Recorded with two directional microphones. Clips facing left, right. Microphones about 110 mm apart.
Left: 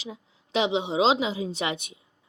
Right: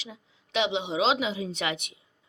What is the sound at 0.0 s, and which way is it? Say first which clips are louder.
A woman's voice: left 5 dB; 35° left (ahead or behind).